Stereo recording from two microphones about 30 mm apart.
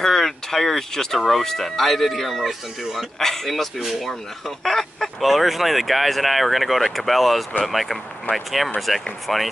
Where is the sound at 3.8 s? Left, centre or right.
Centre.